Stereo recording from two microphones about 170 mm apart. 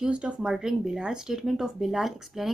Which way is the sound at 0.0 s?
5° right (ahead or behind).